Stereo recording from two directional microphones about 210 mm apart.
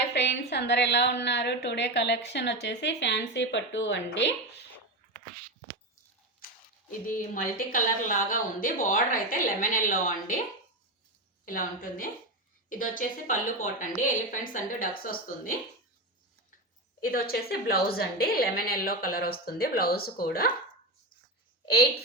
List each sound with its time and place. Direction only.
0.1 s a woman's voice: 55° left (ahead or behind)
7.1 s speech: 40° left (ahead or behind)
11.4 s speech: 40° left (ahead or behind)
17.0 s a woman's voice: 45° left (ahead or behind)